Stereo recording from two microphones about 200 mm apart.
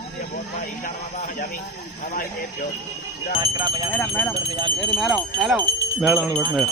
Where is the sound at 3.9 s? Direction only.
10° left (ahead or behind).